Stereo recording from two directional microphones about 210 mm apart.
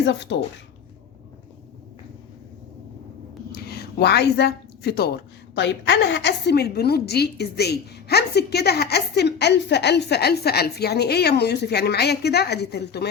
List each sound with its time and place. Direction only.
0.0 s speech: 60° left (ahead or behind)
3.5 s a woman's voice: 50° left (ahead or behind)